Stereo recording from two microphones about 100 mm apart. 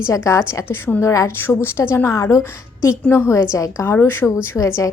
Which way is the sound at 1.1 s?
35° left (ahead or behind).